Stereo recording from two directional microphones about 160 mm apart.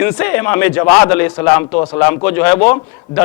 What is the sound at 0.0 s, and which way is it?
Speech, 15° left (ahead or behind).